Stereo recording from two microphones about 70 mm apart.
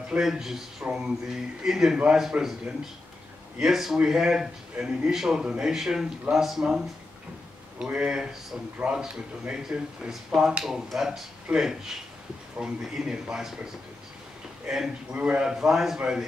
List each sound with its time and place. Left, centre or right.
0.2 s a man's voice: centre
3.6 s a man's voice: centre
7.8 s a man's voice: centre
14.7 s a man's voice: centre
15.1 s a man's voice: centre
15.4 s a man's voice: centre